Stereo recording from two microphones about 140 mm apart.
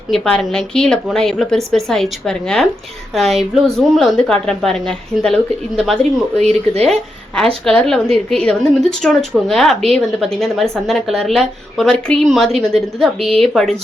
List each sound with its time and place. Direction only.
0.1 s a woman's voice: 5° left (ahead or behind)
6.3 s speech: 50° right (ahead or behind)
6.8 s a woman's voice: 5° left (ahead or behind)